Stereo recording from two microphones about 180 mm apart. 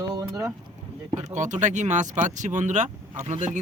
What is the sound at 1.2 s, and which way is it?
Speech, 40° right (ahead or behind).